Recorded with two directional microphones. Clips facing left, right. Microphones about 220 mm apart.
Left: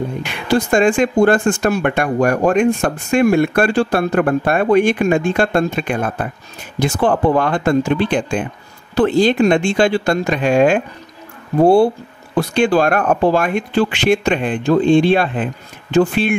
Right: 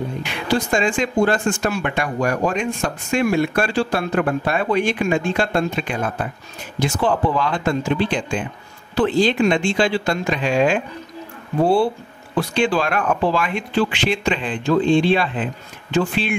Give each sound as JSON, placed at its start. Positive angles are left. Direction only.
{"t": 0.2, "sound": "speech", "side_deg": 55}